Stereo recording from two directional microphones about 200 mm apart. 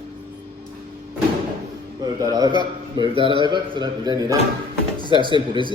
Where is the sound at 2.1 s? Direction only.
20° right (ahead or behind).